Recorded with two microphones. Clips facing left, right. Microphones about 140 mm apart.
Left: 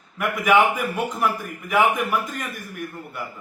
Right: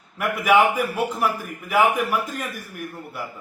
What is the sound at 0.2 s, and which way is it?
A man's voice, 5° right (ahead or behind).